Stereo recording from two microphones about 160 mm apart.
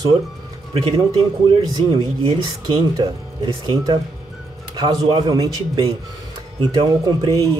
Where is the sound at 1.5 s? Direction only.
25° right (ahead or behind).